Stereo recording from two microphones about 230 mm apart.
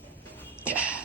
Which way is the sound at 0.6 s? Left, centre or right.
Centre.